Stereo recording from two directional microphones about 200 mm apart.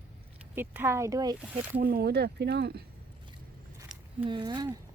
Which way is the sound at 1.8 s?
50° right (ahead or behind).